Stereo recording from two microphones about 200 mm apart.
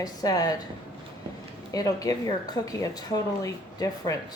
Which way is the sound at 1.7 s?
15° left (ahead or behind).